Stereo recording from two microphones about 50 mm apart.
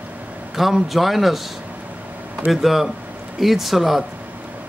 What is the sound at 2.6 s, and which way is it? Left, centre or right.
A man's voice, centre.